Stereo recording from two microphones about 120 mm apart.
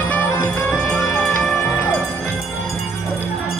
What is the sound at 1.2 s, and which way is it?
Music, 5° left (ahead or behind).